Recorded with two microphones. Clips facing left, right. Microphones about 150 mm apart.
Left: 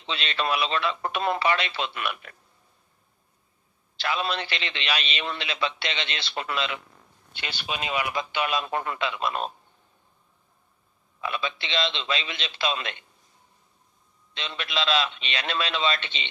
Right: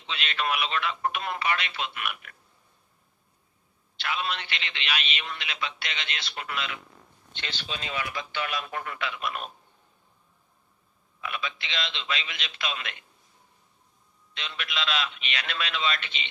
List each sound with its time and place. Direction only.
0.1 s a man's voice: 35° left (ahead or behind)
3.9 s a man's voice: 35° left (ahead or behind)
7.3 s a man's voice: 10° left (ahead or behind); by 9.5 s 30° left (ahead or behind)
11.2 s a man's voice: 30° left (ahead or behind)
14.3 s a man's voice: 30° left (ahead or behind)